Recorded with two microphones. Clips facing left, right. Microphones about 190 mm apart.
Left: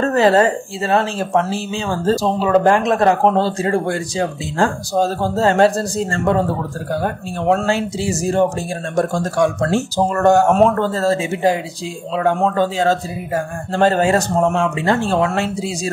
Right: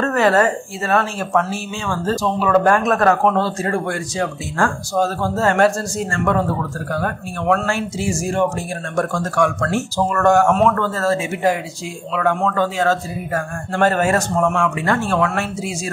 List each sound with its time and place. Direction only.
0.0 s speech: 30° left (ahead or behind)
4.9 s speech: 35° left (ahead or behind)